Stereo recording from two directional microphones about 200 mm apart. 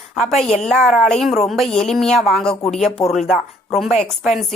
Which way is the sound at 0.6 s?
5° left (ahead or behind).